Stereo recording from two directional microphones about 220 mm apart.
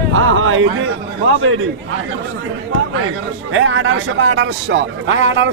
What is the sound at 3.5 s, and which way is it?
A man's voice, 60° right (ahead or behind).